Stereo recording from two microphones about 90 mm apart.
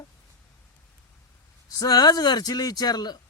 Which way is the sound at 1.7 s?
45° left (ahead or behind).